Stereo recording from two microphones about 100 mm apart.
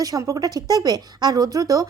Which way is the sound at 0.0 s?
35° right (ahead or behind).